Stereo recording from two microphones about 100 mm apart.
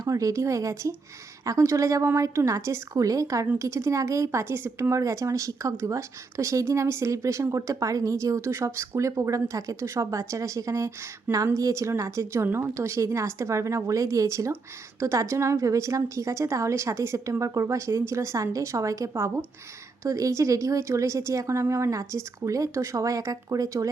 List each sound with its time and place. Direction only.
0.0 s speech: 35° right (ahead or behind)